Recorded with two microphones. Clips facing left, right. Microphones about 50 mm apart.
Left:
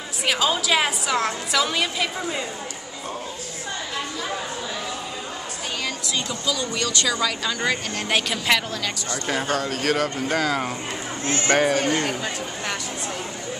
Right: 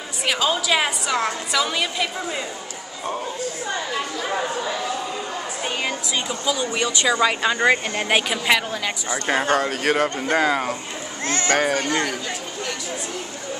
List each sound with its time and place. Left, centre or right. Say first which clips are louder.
0.2 s a woman's voice: even; centre
6.4 s speech: right 4 dB; right
8.3 s a woman's voice: right 2 dB; centre
9.2 s speech: right 5 dB; right
10.5 s a woman's voice: right 2 dB; centre